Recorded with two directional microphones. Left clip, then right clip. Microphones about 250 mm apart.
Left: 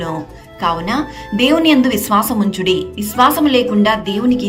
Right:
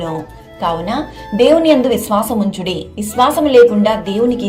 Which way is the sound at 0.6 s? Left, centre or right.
Centre.